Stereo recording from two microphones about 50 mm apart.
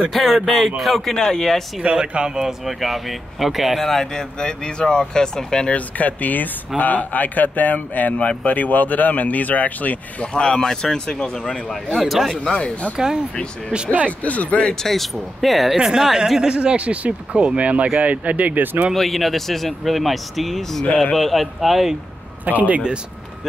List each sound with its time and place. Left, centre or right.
0.1 s speech: centre
1.8 s speech: right
2.6 s speech: centre
5.7 s speech: left
10.2 s speech: left
12.0 s speech: centre
12.5 s speech: left
12.9 s speech: centre
14.0 s speech: left
14.8 s speech: centre
16.5 s speech: right
18.9 s speech: centre
22.4 s speech: right